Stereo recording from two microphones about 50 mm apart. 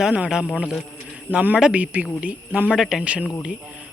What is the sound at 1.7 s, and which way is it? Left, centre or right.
Speech, right.